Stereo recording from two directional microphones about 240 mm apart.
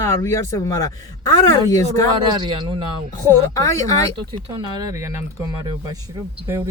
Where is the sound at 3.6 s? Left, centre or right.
Centre.